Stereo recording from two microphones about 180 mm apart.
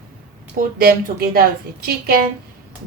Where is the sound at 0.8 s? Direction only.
55° right (ahead or behind).